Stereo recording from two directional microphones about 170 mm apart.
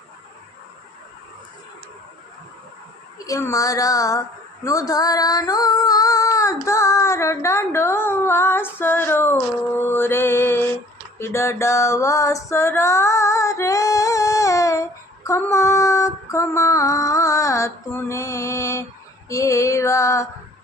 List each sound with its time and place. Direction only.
3.2 s speech: 20° left (ahead or behind)
4.6 s female singing: 20° left (ahead or behind)
19.3 s speech: 20° left (ahead or behind)